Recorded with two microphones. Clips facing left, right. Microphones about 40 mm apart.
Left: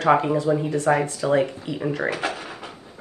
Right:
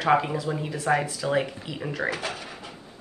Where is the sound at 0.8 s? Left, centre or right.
Left.